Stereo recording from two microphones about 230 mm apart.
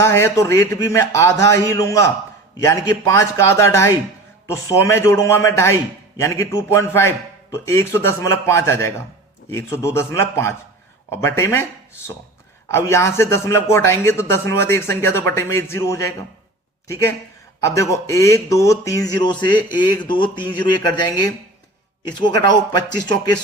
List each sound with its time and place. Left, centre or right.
0.0 s speech: centre
12.7 s speech: centre